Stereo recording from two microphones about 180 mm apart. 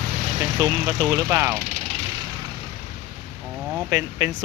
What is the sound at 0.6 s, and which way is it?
Speech, 20° right (ahead or behind).